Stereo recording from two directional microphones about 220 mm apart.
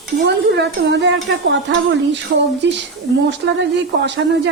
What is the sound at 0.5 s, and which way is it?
Speech, 55° right (ahead or behind).